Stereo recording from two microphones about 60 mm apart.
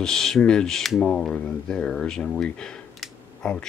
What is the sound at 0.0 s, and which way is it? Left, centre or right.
Speech, centre.